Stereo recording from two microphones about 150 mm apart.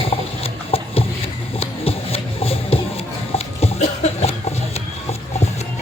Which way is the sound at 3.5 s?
45° left (ahead or behind).